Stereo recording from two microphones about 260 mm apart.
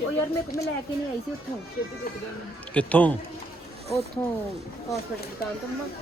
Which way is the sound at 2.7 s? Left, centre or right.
Centre.